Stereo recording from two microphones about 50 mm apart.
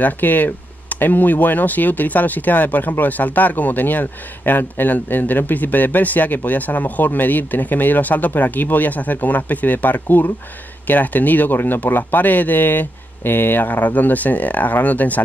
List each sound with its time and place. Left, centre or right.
0.0 s speech: left